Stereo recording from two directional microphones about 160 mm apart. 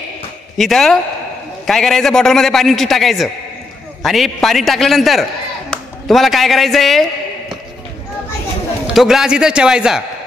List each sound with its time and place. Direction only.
0.6 s a man's voice: centre (ahead or behind)
5.7 s a sound: centre (ahead or behind)
8.8 s a man's voice: centre (ahead or behind)